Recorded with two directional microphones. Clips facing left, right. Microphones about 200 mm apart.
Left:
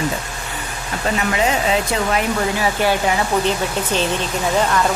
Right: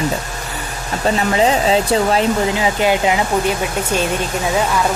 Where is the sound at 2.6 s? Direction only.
15° right (ahead or behind).